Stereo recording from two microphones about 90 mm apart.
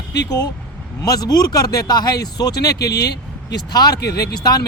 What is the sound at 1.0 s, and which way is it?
Speech, 45° left (ahead or behind).